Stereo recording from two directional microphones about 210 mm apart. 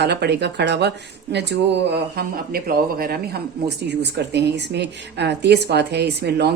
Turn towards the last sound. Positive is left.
turn(degrees=-50)  # may be behind; listen again after turning